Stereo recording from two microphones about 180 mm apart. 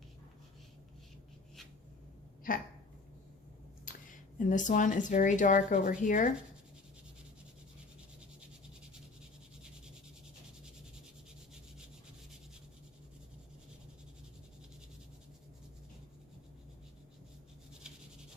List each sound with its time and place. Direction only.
3.9 s a sound: 50° left (ahead or behind)
4.4 s speech: 45° left (ahead or behind)
17.8 s writing: 5° right (ahead or behind)